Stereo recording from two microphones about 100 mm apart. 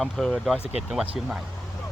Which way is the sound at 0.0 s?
5° left (ahead or behind).